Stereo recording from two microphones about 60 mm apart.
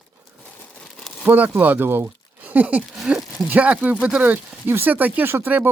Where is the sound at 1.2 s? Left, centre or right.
Right.